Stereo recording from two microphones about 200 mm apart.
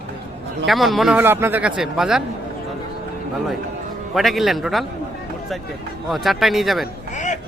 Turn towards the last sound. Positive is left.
turn(degrees=35)  # may be behind; listen again after turning